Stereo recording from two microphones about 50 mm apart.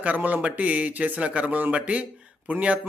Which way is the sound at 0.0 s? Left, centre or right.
Right.